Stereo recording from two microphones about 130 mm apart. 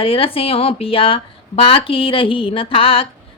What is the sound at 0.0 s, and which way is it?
A woman's voice, 45° left (ahead or behind).